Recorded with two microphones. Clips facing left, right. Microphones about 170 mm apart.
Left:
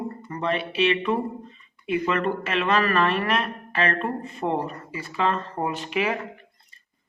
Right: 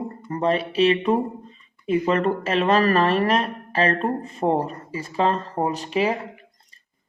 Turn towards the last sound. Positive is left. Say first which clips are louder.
# right 3 dB
turn(degrees=-30)  # may be behind; listen again after turning